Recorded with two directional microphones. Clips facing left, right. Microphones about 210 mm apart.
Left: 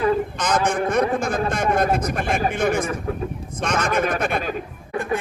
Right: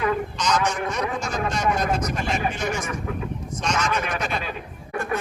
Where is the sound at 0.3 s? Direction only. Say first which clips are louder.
Left 3 dB; 55° left (ahead or behind).